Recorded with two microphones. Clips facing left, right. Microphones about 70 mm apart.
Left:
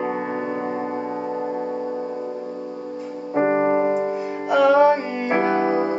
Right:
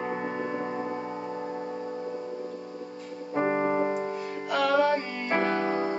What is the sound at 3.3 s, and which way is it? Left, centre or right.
Music, left.